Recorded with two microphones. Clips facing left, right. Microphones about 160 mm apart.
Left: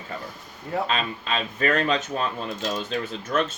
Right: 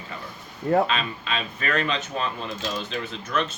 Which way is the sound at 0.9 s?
40° left (ahead or behind).